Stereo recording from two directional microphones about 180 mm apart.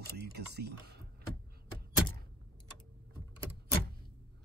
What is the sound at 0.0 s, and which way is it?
Speech, 65° right (ahead or behind).